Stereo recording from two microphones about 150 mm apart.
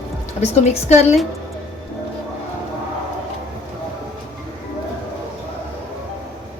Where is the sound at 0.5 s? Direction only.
50° left (ahead or behind).